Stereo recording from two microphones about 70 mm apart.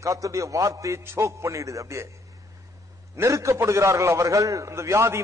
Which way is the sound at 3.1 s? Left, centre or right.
Right.